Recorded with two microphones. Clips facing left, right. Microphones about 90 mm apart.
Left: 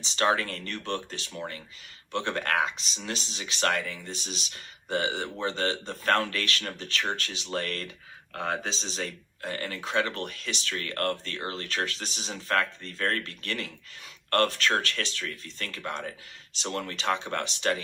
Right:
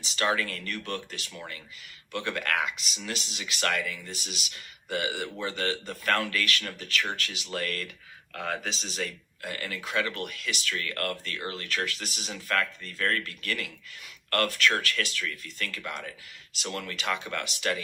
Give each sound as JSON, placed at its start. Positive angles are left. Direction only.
{"t": 0.0, "sound": "speech", "side_deg": 35}